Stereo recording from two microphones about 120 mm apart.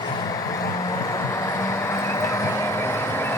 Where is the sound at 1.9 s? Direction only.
25° left (ahead or behind).